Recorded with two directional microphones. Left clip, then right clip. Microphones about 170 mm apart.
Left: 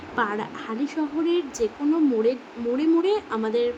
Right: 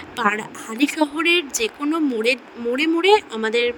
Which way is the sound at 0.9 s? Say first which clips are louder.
Right 7 dB; 60° right (ahead or behind).